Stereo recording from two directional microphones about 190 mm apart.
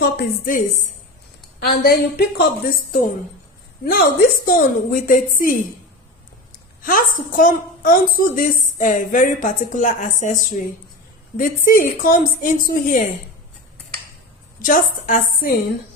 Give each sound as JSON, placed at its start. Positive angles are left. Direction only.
{"t": 0.0, "sound": "a woman's voice", "side_deg": 50}
{"t": 6.8, "sound": "a woman's voice", "side_deg": 45}
{"t": 14.6, "sound": "a woman's voice", "side_deg": 45}